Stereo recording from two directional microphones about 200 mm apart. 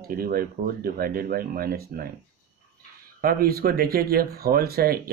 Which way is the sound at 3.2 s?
50° right (ahead or behind).